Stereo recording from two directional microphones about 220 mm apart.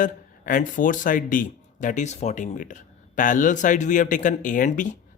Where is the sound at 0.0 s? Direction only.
35° left (ahead or behind).